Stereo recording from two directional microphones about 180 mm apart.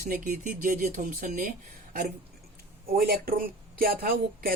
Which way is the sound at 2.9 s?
55° right (ahead or behind).